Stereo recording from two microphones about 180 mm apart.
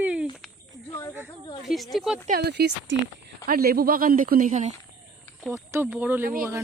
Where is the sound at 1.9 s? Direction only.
Centre (ahead or behind).